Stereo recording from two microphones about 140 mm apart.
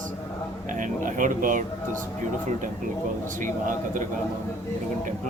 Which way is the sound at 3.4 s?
70° right (ahead or behind).